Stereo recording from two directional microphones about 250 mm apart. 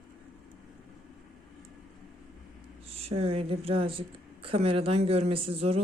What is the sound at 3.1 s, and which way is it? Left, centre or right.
Speech, right.